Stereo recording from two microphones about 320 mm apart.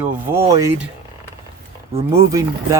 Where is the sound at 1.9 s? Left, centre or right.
Centre.